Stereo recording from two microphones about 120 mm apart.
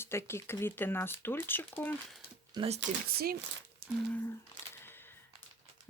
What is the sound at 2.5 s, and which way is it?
Speech, 35° right (ahead or behind).